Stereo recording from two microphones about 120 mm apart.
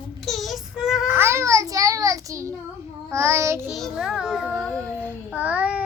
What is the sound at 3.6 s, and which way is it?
Speech, centre (ahead or behind).